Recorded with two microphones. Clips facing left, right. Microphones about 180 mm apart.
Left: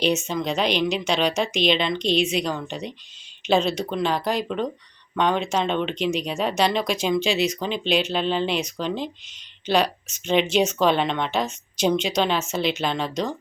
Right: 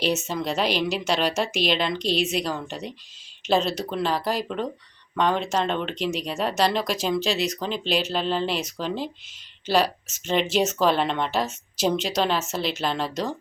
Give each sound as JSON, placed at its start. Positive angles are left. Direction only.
{"t": 0.3, "sound": "speech", "side_deg": -5}